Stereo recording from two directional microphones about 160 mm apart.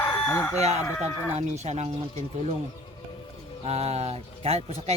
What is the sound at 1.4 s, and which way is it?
Speech, 45° right (ahead or behind).